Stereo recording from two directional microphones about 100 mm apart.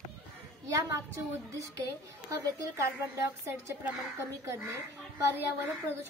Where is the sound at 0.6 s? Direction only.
35° right (ahead or behind).